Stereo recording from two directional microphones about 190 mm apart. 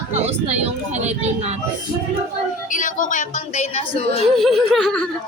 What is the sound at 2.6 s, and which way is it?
A woman's voice, 45° left (ahead or behind).